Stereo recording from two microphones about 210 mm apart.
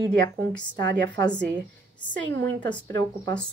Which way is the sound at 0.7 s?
60° right (ahead or behind).